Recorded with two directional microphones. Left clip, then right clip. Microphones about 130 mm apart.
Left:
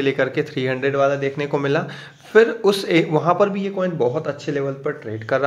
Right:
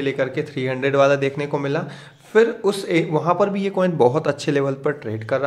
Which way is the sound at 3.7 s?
40° right (ahead or behind).